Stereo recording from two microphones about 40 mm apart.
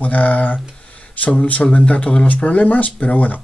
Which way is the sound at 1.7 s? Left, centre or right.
Left.